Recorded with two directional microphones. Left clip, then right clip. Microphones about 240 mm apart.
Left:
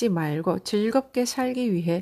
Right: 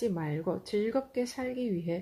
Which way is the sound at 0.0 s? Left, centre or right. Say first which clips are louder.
Left 7 dB; left.